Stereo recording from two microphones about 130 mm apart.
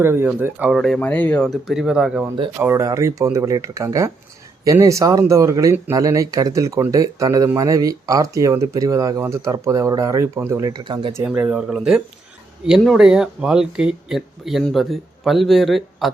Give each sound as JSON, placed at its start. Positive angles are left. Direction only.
{"t": 0.0, "sound": "speech", "side_deg": -20}
{"t": 0.7, "sound": "speech", "side_deg": 0}
{"t": 0.9, "sound": "speech", "side_deg": 10}
{"t": 1.6, "sound": "speech", "side_deg": -5}
{"t": 2.8, "sound": "speech", "side_deg": -25}
{"t": 11.3, "sound": "speech", "side_deg": -10}